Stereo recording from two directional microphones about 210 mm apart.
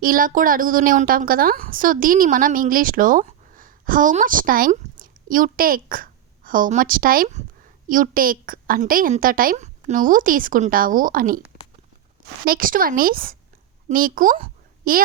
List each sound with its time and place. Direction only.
0.0 s a woman's voice: 40° right (ahead or behind)
12.5 s a woman's voice: 40° right (ahead or behind)